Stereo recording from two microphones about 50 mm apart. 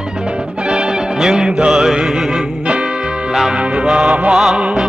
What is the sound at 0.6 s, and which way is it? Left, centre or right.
Music, centre.